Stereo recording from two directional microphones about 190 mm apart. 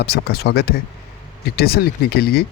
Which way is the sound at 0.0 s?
60° left (ahead or behind).